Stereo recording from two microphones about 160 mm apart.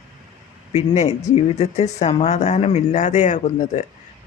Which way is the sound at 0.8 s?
45° left (ahead or behind).